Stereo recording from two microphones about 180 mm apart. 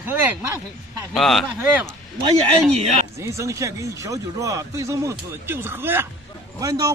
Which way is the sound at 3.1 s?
15° right (ahead or behind).